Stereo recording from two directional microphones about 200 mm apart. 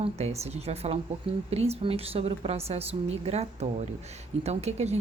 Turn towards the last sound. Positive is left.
turn(degrees=-35)  # may be behind; listen again after turning